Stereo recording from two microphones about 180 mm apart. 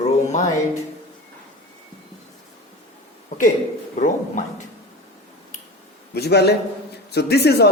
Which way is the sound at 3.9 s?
45° left (ahead or behind).